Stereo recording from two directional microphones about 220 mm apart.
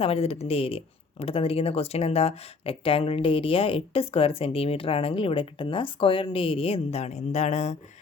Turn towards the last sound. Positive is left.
turn(degrees=30)  # may be behind; listen again after turning